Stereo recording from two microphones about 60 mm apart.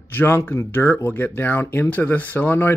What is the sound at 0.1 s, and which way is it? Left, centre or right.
Speech, left.